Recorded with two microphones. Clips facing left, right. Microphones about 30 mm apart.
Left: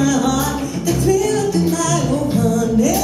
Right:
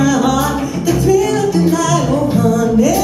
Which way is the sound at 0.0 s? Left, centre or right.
Centre.